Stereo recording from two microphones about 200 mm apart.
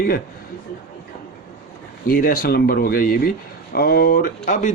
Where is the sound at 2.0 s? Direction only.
45° left (ahead or behind).